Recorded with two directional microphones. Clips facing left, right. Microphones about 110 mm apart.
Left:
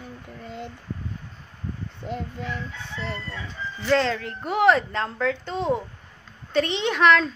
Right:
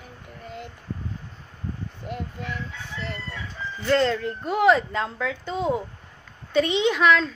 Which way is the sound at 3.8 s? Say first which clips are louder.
Right 1 dB; centre (ahead or behind).